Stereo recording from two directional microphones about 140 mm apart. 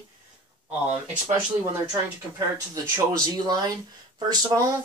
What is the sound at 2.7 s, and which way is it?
Speech, 30° right (ahead or behind).